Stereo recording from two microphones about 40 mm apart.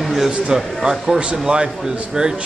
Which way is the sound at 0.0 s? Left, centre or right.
Centre.